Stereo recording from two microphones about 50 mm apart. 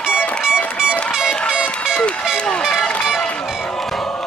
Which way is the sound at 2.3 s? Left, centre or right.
Left.